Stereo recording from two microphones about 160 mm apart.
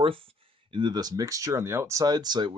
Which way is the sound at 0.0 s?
35° right (ahead or behind).